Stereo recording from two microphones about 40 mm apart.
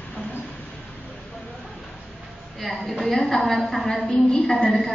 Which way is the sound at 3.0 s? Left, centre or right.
Centre.